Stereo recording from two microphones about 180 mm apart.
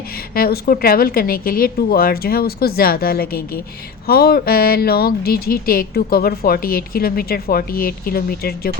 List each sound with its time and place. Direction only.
0.3 s speech: 55° left (ahead or behind)